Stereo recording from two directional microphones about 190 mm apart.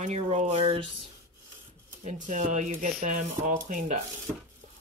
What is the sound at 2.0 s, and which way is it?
Speech, 40° right (ahead or behind).